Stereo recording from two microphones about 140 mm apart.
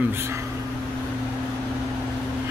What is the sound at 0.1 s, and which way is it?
Speech, 20° right (ahead or behind).